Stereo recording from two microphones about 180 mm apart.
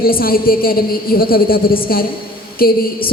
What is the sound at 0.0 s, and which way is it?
A man's voice, 55° left (ahead or behind).